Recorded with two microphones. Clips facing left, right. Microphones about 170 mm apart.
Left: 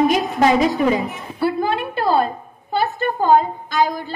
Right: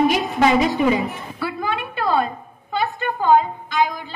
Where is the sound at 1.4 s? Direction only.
30° left (ahead or behind).